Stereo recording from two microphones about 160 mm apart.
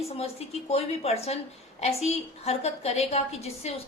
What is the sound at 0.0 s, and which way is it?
A woman's voice, 40° left (ahead or behind).